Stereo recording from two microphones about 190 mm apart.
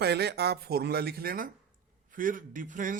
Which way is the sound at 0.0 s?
60° right (ahead or behind).